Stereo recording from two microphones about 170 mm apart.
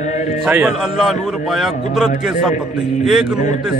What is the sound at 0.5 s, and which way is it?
A man's voice, 5° right (ahead or behind).